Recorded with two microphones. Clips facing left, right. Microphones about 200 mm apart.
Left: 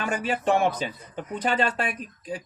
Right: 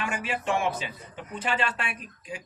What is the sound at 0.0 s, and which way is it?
Speech, 35° left (ahead or behind).